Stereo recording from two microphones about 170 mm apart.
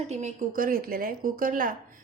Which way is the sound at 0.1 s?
50° right (ahead or behind).